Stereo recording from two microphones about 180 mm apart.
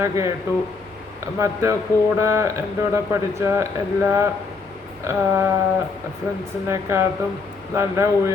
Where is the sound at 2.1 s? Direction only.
15° right (ahead or behind).